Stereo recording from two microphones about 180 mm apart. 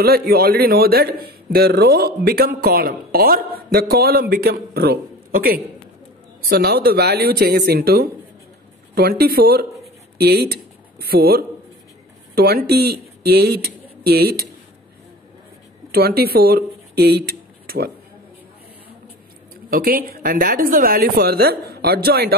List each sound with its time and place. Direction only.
0.0 s a man's voice: 60° right (ahead or behind)
15.9 s speech: 60° right (ahead or behind)
19.7 s a man's voice: 55° right (ahead or behind)